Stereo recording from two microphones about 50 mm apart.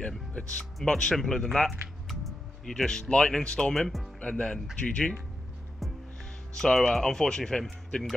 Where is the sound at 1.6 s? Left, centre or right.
Centre.